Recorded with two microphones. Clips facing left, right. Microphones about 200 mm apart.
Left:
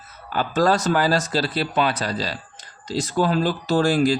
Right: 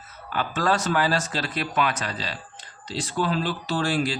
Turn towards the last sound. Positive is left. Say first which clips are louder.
# left 7 dB
turn(degrees=40)  # may be behind; listen again after turning